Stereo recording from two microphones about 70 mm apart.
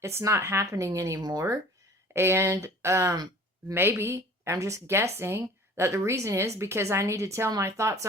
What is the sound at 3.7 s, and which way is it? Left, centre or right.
Speech, right.